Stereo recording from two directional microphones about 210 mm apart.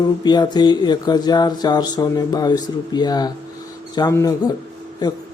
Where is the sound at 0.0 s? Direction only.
20° left (ahead or behind).